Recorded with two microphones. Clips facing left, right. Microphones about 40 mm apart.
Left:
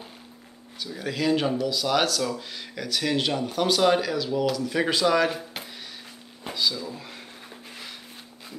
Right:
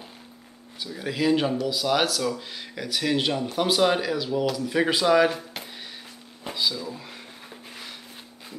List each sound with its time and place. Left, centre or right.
0.8 s speech: centre
6.4 s speech: centre